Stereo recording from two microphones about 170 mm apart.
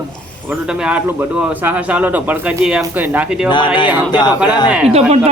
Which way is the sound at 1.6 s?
10° right (ahead or behind).